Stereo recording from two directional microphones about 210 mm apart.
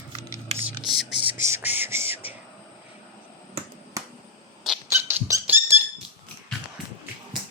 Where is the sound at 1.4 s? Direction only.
10° right (ahead or behind).